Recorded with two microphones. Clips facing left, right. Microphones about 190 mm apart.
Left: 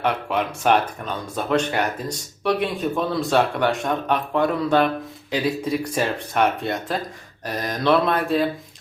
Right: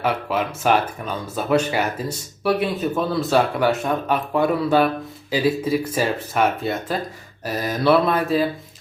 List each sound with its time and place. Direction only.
0.0 s speech: 5° right (ahead or behind)